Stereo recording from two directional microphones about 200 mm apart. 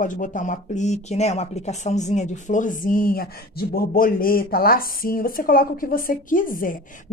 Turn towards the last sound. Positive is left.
turn(degrees=45)  # may be behind; listen again after turning